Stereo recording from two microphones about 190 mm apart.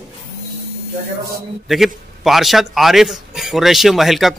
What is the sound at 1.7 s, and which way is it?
A man's voice, centre (ahead or behind).